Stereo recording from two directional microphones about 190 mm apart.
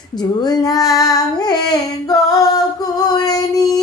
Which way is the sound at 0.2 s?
20° left (ahead or behind).